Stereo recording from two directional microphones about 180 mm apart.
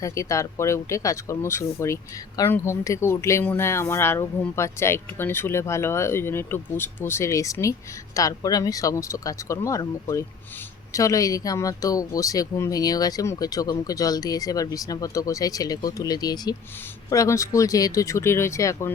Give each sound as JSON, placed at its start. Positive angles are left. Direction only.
{"t": 0.0, "sound": "speech", "side_deg": 15}